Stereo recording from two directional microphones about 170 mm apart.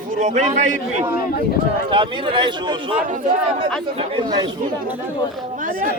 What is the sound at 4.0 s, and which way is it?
Speech, 30° right (ahead or behind).